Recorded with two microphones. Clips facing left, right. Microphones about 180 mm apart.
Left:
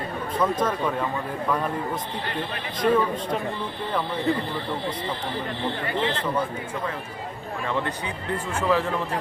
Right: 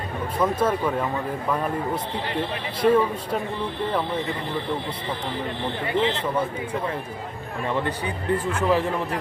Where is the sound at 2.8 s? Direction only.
10° right (ahead or behind).